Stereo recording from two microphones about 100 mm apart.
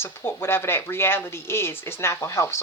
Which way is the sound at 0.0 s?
25° left (ahead or behind).